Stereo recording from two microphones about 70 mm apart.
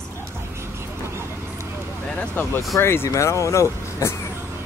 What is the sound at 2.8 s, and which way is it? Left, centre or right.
Speech, left.